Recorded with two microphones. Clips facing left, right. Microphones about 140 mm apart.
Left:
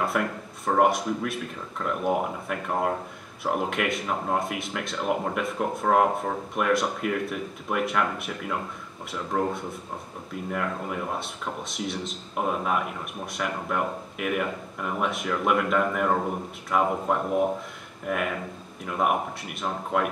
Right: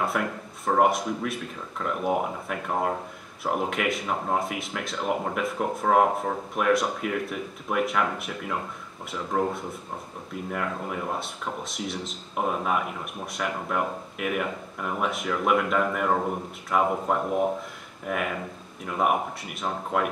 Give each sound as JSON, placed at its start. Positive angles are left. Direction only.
{"t": 0.0, "sound": "speech", "side_deg": 0}